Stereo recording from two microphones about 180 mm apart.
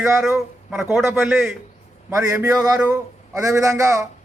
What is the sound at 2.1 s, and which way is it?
A man's voice, 15° right (ahead or behind).